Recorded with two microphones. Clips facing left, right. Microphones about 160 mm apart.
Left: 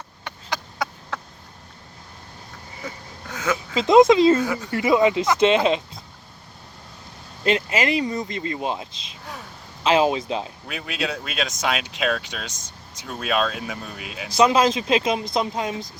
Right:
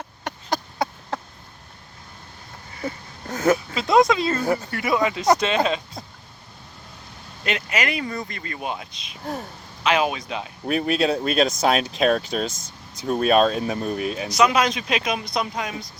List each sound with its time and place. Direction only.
0.3 s a sound: 45° right (ahead or behind)
2.8 s a sound: 40° right (ahead or behind)
3.8 s speech: 20° left (ahead or behind)
4.4 s speech: 40° right (ahead or behind)
4.7 s speech: 20° left (ahead or behind)
7.4 s speech: 30° left (ahead or behind)
9.2 s speech: 45° right (ahead or behind)
9.8 s speech: 30° left (ahead or behind)
10.7 s speech: 40° right (ahead or behind)
14.3 s speech: 25° left (ahead or behind)